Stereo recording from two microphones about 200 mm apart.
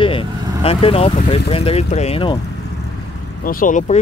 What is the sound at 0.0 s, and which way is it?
Speech, 25° left (ahead or behind).